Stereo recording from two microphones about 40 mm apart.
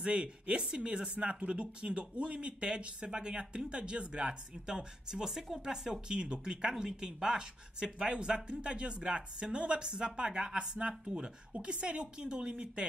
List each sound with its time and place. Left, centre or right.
0.0 s speech: right